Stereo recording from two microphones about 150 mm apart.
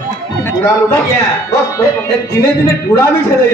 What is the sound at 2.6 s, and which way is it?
Speech, 20° left (ahead or behind).